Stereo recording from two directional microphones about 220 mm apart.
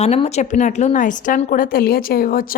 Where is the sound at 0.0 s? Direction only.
30° left (ahead or behind).